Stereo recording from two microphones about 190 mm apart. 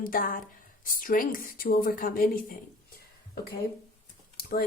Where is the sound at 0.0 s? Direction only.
45° left (ahead or behind).